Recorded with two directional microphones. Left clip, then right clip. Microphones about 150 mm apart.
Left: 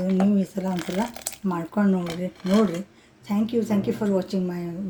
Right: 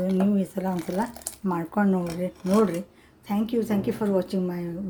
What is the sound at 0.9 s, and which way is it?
Speech, 15° left (ahead or behind).